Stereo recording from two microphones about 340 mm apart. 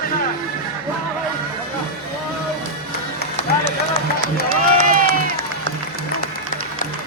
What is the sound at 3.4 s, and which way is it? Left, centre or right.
Run, centre.